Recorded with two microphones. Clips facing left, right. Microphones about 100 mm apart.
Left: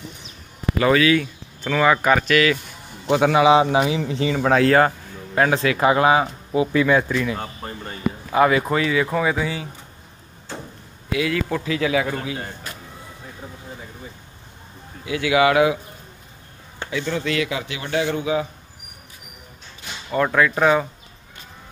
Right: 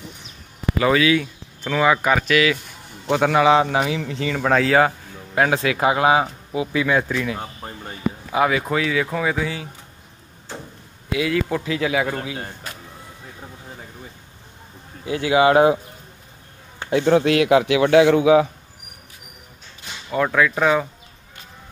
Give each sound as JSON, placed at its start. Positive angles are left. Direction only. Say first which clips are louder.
{"t": 0.7, "sound": "speech", "louder": "left 1 dB", "side_deg": -15}
{"t": 3.1, "sound": "a man's voice", "louder": "left 1 dB", "side_deg": 10}
{"t": 11.1, "sound": "speech", "louder": "right 1 dB", "side_deg": -15}
{"t": 15.0, "sound": "a man's voice", "louder": "right 1 dB", "side_deg": -35}
{"t": 16.9, "sound": "speech", "louder": "right 8 dB", "side_deg": -60}
{"t": 20.1, "sound": "a man's voice", "louder": "even", "side_deg": 0}